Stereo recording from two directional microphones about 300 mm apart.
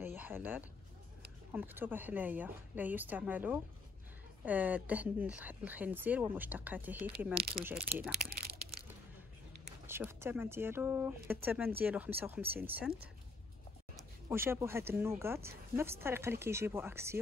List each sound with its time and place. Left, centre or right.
0.0 s a sound: centre
1.5 s speech: centre
8.2 s crumpling: right
9.8 s speech: centre
13.9 s speech: centre